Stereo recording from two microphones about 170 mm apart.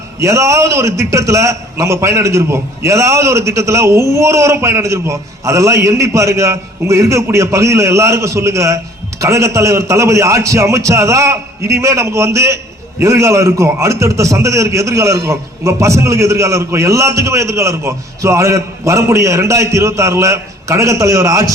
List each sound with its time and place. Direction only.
0.2 s a man's voice: 15° right (ahead or behind)